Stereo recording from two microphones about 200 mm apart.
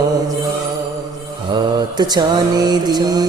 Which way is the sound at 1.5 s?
20° right (ahead or behind).